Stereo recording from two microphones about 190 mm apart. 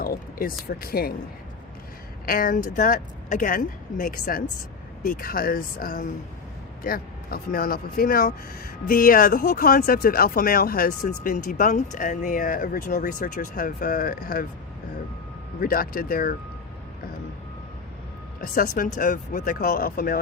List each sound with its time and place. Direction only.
0.0 s a sound: 50° left (ahead or behind)
0.7 s speech: 55° left (ahead or behind)
2.2 s speech: 50° left (ahead or behind)
15.6 s speech: 50° left (ahead or behind)
18.3 s speech: 50° left (ahead or behind)